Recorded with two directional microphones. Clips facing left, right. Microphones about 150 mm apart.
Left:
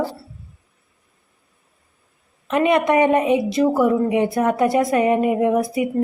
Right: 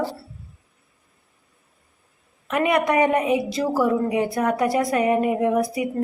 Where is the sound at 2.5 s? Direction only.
25° left (ahead or behind).